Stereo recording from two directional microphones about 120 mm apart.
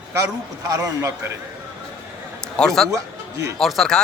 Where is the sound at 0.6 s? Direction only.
25° right (ahead or behind).